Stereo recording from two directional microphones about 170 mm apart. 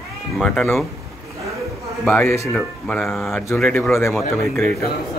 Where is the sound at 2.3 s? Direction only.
15° left (ahead or behind).